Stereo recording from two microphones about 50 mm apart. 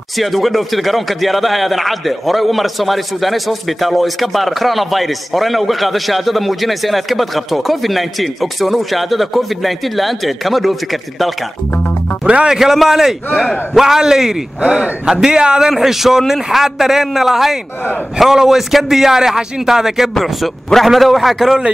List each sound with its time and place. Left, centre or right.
0.2 s speech: centre
12.3 s speech: right
12.5 s a man's voice: centre